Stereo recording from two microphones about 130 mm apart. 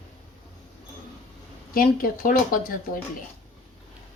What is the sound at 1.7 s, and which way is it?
Speech, 90° left.